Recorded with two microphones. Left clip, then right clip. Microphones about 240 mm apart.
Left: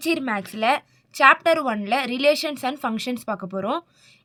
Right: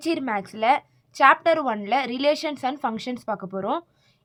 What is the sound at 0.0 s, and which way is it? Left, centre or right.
A woman's voice, left.